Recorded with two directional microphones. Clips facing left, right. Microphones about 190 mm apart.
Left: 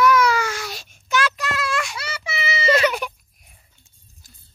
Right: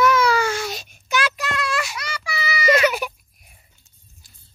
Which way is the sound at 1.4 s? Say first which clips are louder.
Even; centre (ahead or behind).